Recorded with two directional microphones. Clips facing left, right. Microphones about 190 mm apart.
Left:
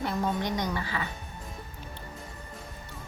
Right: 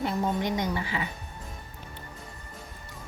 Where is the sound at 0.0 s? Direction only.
15° right (ahead or behind).